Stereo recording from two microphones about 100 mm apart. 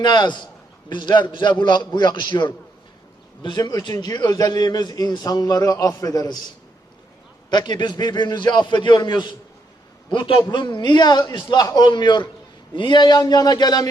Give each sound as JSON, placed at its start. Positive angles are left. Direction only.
{"t": 0.0, "sound": "a man's voice", "side_deg": 50}
{"t": 7.5, "sound": "a man's voice", "side_deg": 50}
{"t": 10.1, "sound": "a man's voice", "side_deg": 60}